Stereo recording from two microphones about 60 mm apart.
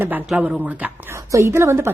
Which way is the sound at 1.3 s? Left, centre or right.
Right.